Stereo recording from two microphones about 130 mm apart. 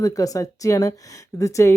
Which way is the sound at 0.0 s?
25° left (ahead or behind).